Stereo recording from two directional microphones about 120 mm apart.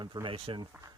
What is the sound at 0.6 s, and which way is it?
Speech, 35° right (ahead or behind).